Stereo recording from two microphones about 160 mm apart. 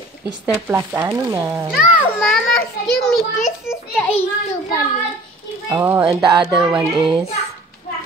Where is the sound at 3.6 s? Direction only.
15° left (ahead or behind).